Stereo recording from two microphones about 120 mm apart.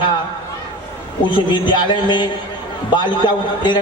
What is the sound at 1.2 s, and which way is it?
A man's voice, 40° left (ahead or behind).